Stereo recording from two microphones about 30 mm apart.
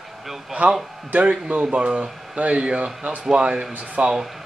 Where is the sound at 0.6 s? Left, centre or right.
Right.